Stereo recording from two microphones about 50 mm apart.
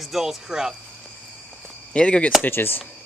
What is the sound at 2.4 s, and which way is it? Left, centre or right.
Speech, left.